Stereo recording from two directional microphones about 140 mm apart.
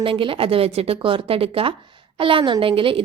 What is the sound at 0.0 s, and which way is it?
A woman's voice, 40° right (ahead or behind).